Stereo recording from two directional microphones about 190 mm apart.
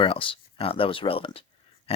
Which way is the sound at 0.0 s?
30° left (ahead or behind).